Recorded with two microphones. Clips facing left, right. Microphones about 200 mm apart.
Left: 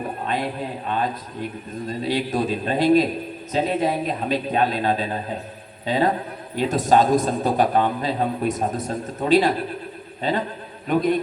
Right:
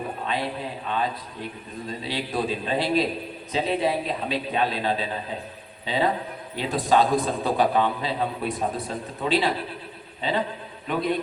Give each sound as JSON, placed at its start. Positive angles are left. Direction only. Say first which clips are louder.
{"t": 0.3, "sound": "a man's voice", "louder": "left 3 dB", "side_deg": 45}